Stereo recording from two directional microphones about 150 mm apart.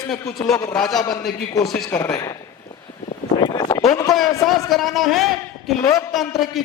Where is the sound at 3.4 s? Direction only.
25° left (ahead or behind).